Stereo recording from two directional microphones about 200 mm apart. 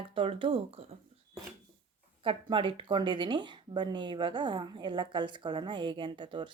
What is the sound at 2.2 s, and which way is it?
Speech, 25° right (ahead or behind).